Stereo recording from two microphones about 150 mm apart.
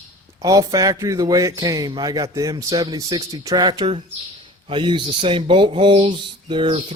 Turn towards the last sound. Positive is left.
turn(degrees=-35)  # may be behind; listen again after turning